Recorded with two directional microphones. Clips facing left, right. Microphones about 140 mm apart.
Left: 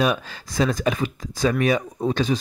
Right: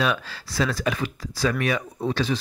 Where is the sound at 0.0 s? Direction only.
20° left (ahead or behind).